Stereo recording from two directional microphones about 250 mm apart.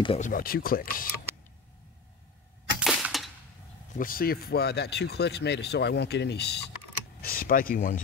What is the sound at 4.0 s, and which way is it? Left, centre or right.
Speech, left.